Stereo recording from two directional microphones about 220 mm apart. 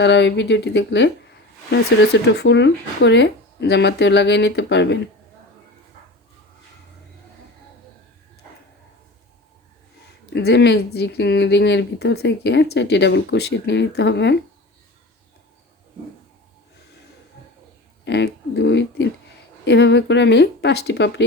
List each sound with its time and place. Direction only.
0.0 s speech: 55° left (ahead or behind)
2.2 s speech: 50° left (ahead or behind)
10.2 s speech: 50° left (ahead or behind)
18.0 s speech: 50° left (ahead or behind)